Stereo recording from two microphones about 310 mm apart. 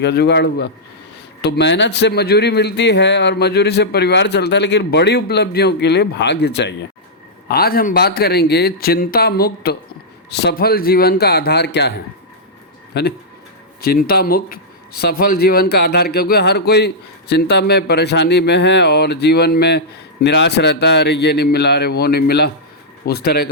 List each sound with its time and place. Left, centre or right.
0.0 s speech: left